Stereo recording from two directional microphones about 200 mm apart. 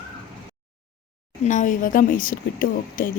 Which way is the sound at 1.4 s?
40° left (ahead or behind).